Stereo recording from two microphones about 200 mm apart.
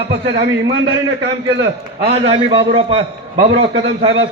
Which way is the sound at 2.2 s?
25° right (ahead or behind).